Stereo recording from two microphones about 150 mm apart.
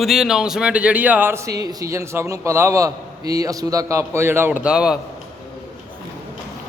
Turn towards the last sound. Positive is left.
turn(degrees=-5)  # may be behind; listen again after turning